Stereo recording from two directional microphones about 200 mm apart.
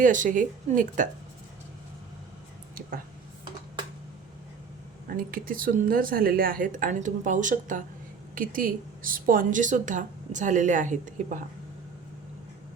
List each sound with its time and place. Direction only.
0.0 s a woman's voice: 40° right (ahead or behind)
5.0 s a woman's voice: 45° right (ahead or behind)